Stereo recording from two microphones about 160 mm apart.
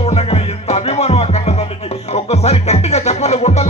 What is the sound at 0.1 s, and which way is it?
Music, 40° left (ahead or behind).